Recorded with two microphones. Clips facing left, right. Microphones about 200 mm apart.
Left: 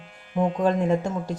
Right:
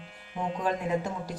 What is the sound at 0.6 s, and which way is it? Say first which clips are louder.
Speech: left 4 dB; 25° left (ahead or behind).